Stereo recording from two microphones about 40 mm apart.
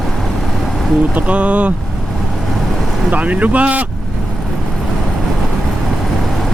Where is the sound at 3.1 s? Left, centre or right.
Right.